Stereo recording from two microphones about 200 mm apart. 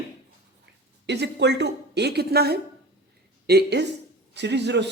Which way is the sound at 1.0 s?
60° right (ahead or behind).